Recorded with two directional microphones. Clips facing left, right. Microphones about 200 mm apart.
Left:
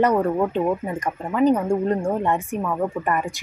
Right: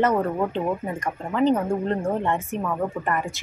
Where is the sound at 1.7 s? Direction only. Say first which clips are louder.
Left 3 dB; 10° left (ahead or behind).